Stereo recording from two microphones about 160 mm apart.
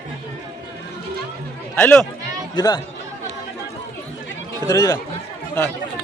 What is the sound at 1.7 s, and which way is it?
Speech, 10° left (ahead or behind).